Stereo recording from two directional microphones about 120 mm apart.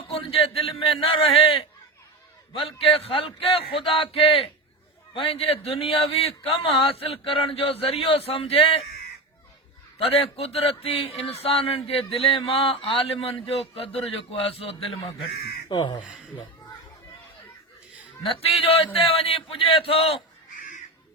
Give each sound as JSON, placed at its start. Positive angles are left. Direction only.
{"t": 0.1, "sound": "a sound", "side_deg": 50}
{"t": 0.9, "sound": "a man's voice", "side_deg": 50}
{"t": 10.0, "sound": "a man's voice", "side_deg": 55}
{"t": 15.7, "sound": "speech", "side_deg": 40}
{"t": 16.0, "sound": "a sound", "side_deg": -10}
{"t": 18.2, "sound": "a man's voice", "side_deg": 50}